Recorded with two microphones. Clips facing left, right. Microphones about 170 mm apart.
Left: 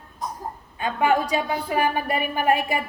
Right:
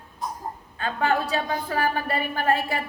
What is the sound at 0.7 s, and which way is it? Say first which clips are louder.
A woman's voice: left 3 dB; 15° left (ahead or behind).